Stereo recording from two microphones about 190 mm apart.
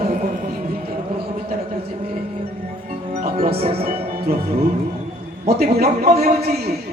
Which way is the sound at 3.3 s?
30° right (ahead or behind).